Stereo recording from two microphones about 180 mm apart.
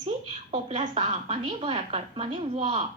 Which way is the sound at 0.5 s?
35° right (ahead or behind).